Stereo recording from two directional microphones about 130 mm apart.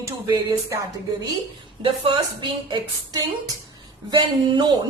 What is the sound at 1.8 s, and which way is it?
Speech, 40° right (ahead or behind).